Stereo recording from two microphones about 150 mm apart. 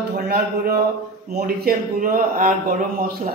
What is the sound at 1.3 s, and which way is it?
A woman's voice, 75° right (ahead or behind).